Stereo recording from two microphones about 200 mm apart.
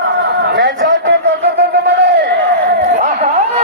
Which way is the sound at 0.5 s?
45° right (ahead or behind).